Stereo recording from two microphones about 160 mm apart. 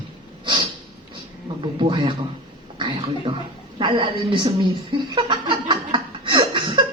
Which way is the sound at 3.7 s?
30° right (ahead or behind).